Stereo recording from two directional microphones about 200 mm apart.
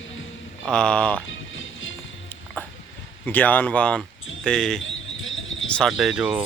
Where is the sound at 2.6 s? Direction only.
10° left (ahead or behind).